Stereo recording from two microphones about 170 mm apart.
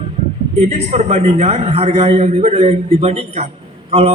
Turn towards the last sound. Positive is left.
turn(degrees=-35)  # may be behind; listen again after turning